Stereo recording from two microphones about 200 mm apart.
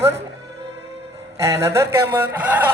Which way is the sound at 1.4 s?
15° right (ahead or behind).